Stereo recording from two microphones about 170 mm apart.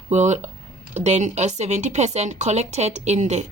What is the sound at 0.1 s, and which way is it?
Speech, 45° right (ahead or behind).